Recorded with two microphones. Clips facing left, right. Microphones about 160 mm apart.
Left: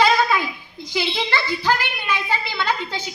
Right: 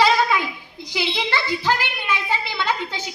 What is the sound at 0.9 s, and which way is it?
A woman's voice, 15° right (ahead or behind).